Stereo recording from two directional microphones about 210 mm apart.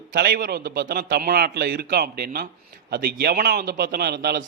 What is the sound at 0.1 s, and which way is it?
A man's voice, 50° right (ahead or behind).